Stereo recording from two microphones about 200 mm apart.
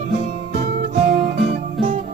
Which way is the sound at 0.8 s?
35° right (ahead or behind).